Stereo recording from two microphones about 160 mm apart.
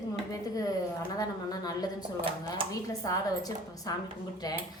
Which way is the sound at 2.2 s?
35° right (ahead or behind).